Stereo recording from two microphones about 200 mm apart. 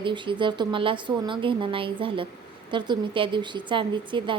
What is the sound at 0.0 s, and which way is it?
A woman's voice, 25° right (ahead or behind).